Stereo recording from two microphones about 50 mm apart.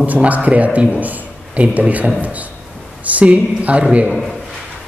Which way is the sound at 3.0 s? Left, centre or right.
Right.